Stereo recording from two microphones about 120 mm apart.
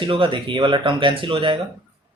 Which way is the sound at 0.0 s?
45° right (ahead or behind).